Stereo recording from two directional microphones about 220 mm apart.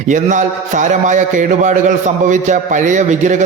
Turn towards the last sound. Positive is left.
turn(degrees=-35)  # may be behind; listen again after turning